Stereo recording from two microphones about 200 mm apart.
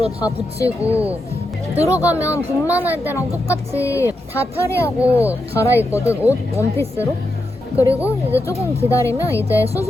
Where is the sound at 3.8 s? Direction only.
15° left (ahead or behind).